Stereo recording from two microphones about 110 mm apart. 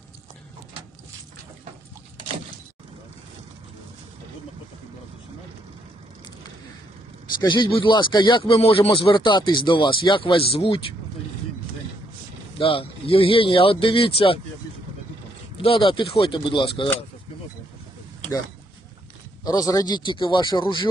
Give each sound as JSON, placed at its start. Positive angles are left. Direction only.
{"t": 7.4, "sound": "speech", "side_deg": 45}
{"t": 12.5, "sound": "speech", "side_deg": 55}
{"t": 15.5, "sound": "speech", "side_deg": 55}
{"t": 19.5, "sound": "a man's voice", "side_deg": 35}